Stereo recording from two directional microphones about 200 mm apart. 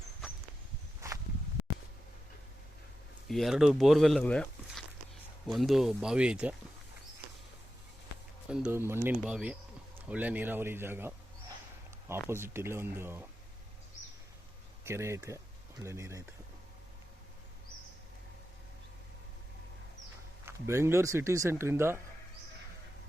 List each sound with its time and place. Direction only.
1.0 s walk: 15° right (ahead or behind)
3.2 s speech: centre (ahead or behind)
8.4 s speech: 5° right (ahead or behind)
12.3 s speech: 10° right (ahead or behind)
14.8 s speech: 15° right (ahead or behind)
20.4 s speech: 15° right (ahead or behind)